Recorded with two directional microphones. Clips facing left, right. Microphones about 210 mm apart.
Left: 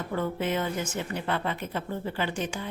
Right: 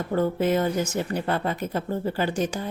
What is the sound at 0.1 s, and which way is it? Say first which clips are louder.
A woman's voice: right 7 dB; 40° right (ahead or behind).